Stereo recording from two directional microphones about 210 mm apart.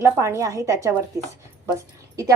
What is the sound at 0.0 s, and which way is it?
A woman's voice, 15° right (ahead or behind).